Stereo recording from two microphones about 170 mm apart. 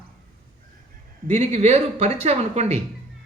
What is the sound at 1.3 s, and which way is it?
Speech, 40° right (ahead or behind).